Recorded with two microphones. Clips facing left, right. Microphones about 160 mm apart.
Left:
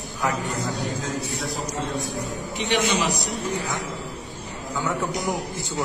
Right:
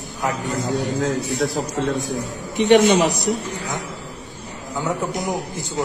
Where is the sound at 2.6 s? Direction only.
50° right (ahead or behind).